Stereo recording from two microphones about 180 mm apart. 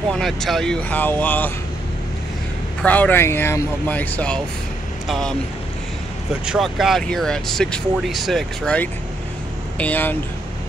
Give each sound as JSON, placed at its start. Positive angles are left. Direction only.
{"t": 0.1, "sound": "speech", "side_deg": 0}
{"t": 2.8, "sound": "speech", "side_deg": 10}
{"t": 6.4, "sound": "speech", "side_deg": -5}